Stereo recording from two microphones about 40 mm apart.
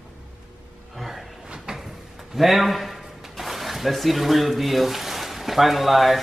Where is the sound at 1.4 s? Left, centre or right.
Centre.